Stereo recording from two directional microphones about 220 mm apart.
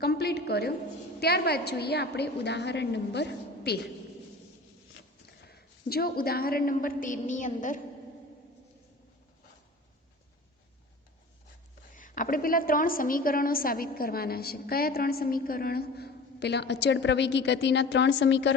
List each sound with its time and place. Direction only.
0.0 s a sound: 45° left (ahead or behind)
1.2 s a woman's voice: 45° left (ahead or behind)
5.5 s a woman's voice: 45° left (ahead or behind)
11.9 s a woman's voice: 35° left (ahead or behind); by 18.5 s 55° left (ahead or behind)